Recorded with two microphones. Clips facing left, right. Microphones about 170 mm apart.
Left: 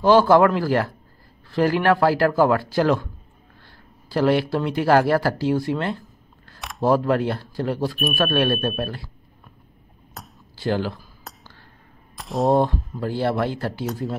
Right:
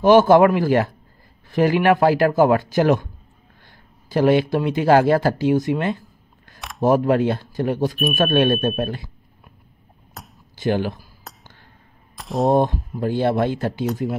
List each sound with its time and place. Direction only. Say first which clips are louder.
0.0 s a man's voice: right 2 dB; 20° right (ahead or behind)
4.1 s a man's voice: right 3 dB; 20° right (ahead or behind)
10.2 s a sound: even; centre (ahead or behind)
10.5 s speech: right 2 dB; 20° right (ahead or behind)
11.3 s a sound: even; centre (ahead or behind)
12.2 s speech: right 1 dB; centre (ahead or behind)
12.5 s a man's voice: right 2 dB; 20° right (ahead or behind)